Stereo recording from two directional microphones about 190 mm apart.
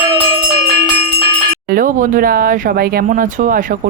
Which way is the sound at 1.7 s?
45° right (ahead or behind).